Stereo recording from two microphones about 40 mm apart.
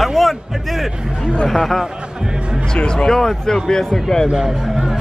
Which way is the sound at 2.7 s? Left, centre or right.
Left.